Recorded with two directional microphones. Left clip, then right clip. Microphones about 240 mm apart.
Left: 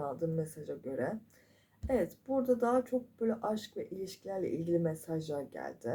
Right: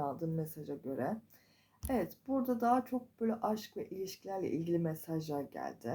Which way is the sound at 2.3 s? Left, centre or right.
Right.